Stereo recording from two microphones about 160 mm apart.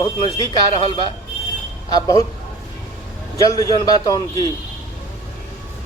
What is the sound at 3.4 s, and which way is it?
Speech, 20° left (ahead or behind).